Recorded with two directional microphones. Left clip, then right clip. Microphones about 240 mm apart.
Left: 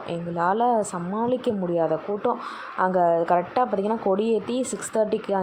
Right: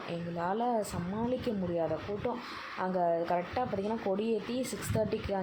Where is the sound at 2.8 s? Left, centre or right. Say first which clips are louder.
Left 10 dB; centre.